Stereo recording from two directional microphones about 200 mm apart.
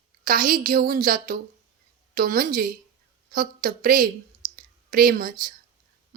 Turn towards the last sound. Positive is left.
turn(degrees=-45)  # may be behind; listen again after turning